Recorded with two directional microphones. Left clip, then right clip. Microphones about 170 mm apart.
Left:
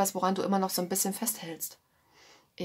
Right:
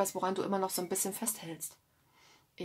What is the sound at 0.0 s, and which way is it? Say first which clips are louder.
Speech: left 4 dB; 25° left (ahead or behind).